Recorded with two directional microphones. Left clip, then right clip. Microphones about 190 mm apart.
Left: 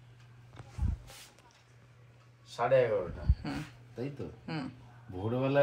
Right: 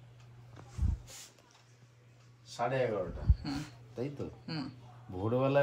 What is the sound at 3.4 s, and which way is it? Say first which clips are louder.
Speech: left 1 dB; 5° right (ahead or behind).